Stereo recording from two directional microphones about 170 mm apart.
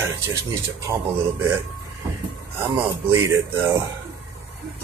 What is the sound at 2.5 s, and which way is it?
Speech, 15° right (ahead or behind).